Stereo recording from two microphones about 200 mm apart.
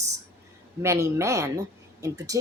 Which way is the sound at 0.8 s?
15° right (ahead or behind).